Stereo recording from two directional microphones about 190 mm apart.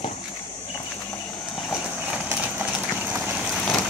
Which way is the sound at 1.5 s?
Centre (ahead or behind).